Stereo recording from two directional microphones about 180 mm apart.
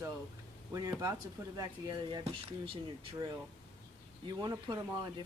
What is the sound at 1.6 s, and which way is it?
Speech, 20° right (ahead or behind).